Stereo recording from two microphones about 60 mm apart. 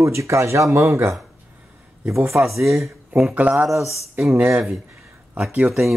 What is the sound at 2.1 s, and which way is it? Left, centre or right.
Speech, right.